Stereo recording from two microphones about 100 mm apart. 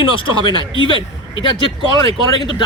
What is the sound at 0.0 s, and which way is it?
Speech, 60° left (ahead or behind).